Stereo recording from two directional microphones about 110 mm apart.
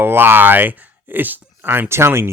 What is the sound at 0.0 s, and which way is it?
Speech, 20° right (ahead or behind).